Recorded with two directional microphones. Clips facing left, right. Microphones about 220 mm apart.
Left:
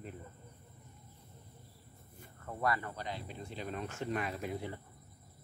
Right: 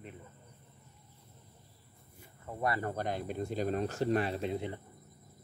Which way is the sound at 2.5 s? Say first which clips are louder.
Right 1 dB; 20° right (ahead or behind).